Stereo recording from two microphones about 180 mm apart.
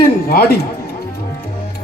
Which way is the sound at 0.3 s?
60° left (ahead or behind).